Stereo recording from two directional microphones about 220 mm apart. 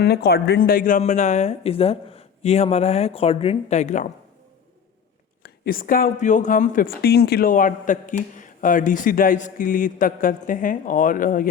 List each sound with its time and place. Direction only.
0.0 s a man's voice: 45° left (ahead or behind)
5.4 s a man's voice: 40° left (ahead or behind)